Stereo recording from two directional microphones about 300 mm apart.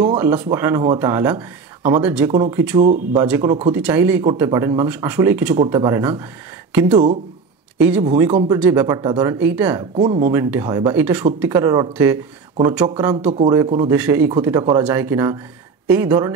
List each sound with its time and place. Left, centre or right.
0.0 s speech: centre
2.8 s speech: right
3.2 s speech: centre
8.3 s speech: right
8.5 s speech: centre
9.9 s speech: right
10.3 s speech: centre